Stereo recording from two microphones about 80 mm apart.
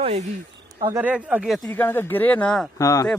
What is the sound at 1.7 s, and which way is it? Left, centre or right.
Speech, left.